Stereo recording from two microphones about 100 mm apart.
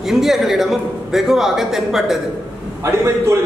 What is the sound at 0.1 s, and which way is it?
A man's voice, 5° right (ahead or behind).